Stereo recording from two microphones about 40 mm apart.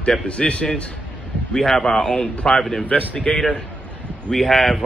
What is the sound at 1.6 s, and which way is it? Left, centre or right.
Speech, centre.